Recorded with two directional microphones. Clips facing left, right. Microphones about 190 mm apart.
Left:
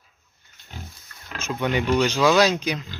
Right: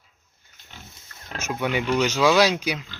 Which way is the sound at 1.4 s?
10° right (ahead or behind).